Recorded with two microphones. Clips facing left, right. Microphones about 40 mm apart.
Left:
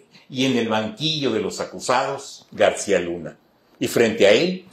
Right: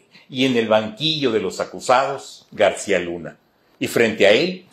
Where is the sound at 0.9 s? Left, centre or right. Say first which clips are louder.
Right 2 dB; right; by 4.6 s centre.